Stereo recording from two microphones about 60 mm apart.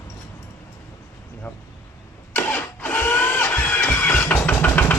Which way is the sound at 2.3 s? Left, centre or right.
Left.